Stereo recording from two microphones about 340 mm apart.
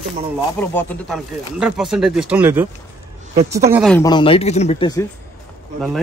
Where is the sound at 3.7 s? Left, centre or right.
Centre.